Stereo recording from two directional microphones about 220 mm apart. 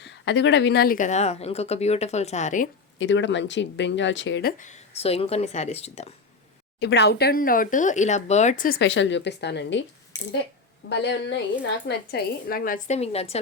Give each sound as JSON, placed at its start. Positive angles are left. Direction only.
{"t": 0.0, "sound": "speech", "side_deg": 55}
{"t": 3.0, "sound": "speech", "side_deg": 55}
{"t": 4.5, "sound": "a woman's voice", "side_deg": 35}
{"t": 6.7, "sound": "speech", "side_deg": 50}
{"t": 10.1, "sound": "speech", "side_deg": 15}
{"t": 10.8, "sound": "speech", "side_deg": 50}